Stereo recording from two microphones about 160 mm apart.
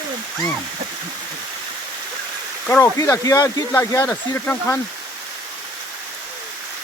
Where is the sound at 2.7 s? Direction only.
15° left (ahead or behind).